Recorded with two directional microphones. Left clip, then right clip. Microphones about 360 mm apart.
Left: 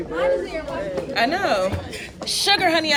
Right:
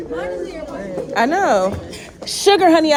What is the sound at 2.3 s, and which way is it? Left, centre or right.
Speech, right.